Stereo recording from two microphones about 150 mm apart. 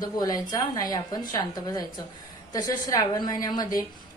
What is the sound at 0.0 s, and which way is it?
A woman's voice, 25° left (ahead or behind).